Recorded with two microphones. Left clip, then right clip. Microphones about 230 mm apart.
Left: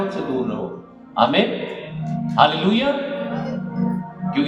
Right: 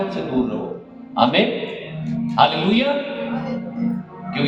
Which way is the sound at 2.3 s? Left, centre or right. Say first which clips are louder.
Even; left.